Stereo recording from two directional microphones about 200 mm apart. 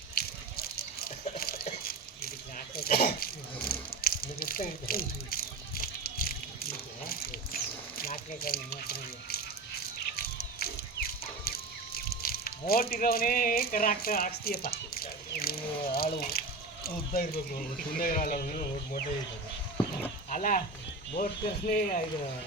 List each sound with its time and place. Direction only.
0.1 s a sound: 50° left (ahead or behind)
16.8 s speech: 50° left (ahead or behind)
20.3 s speech: 40° left (ahead or behind)